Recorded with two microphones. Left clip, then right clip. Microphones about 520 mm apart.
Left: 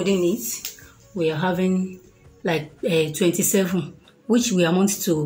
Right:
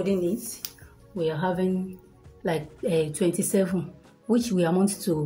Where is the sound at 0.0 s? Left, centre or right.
Right.